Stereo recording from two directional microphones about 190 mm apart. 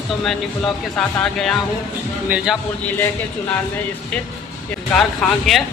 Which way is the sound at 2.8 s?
10° left (ahead or behind).